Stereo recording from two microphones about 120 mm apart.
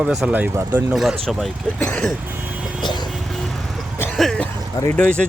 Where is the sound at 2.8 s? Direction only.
35° left (ahead or behind).